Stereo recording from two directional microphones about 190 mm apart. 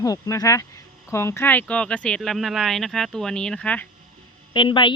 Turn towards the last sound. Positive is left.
turn(degrees=25)  # may be behind; listen again after turning